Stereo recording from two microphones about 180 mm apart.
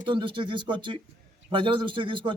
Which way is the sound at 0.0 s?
25° right (ahead or behind).